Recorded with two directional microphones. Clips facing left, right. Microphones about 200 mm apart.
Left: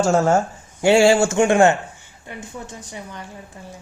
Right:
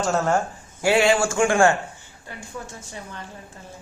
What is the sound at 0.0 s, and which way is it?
A woman's voice, 25° left (ahead or behind).